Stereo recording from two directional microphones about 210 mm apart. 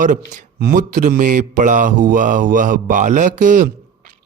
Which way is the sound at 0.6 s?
40° right (ahead or behind).